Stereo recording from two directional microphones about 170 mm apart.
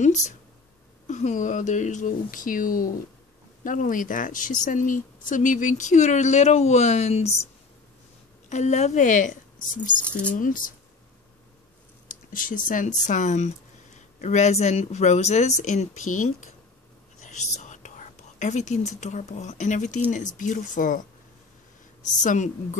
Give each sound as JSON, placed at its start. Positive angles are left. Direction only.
{"t": 0.0, "sound": "speech", "side_deg": 45}
{"t": 8.5, "sound": "speech", "side_deg": 45}
{"t": 10.0, "sound": "speech", "side_deg": 5}
{"t": 10.3, "sound": "speech", "side_deg": 50}
{"t": 12.1, "sound": "speech", "side_deg": 50}
{"t": 22.2, "sound": "speech", "side_deg": 45}